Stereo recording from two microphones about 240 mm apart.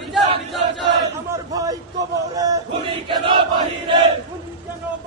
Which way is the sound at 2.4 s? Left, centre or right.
Centre.